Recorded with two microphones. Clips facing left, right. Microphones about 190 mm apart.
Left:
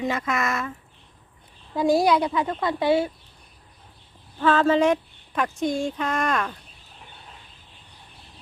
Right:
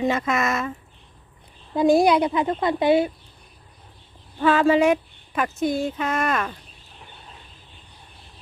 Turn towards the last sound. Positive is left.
turn(degrees=-5)  # may be behind; listen again after turning